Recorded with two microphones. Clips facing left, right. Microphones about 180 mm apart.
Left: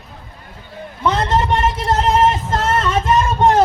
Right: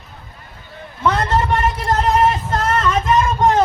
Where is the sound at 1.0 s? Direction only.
20° left (ahead or behind).